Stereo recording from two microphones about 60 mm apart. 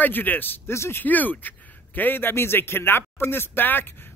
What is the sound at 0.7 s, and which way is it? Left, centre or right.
Speech, left.